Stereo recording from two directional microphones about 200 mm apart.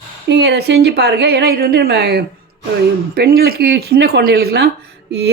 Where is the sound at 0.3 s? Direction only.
55° right (ahead or behind).